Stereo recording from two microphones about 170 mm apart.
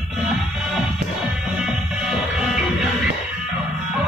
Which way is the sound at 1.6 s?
5° right (ahead or behind).